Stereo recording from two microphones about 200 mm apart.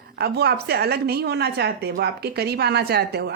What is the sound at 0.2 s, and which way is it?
A woman's voice, 55° right (ahead or behind).